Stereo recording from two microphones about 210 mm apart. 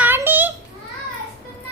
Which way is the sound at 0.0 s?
10° right (ahead or behind).